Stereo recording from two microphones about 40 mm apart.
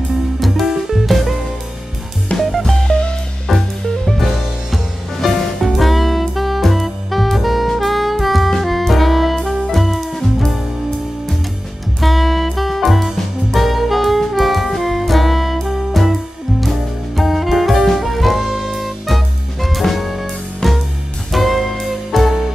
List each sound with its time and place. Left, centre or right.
0.4 s music: centre
2.3 s drum kit: centre
2.9 s music: left
3.4 s music: centre
12.0 s music: centre